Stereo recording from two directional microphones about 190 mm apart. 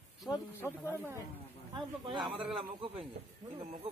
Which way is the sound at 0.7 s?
10° left (ahead or behind).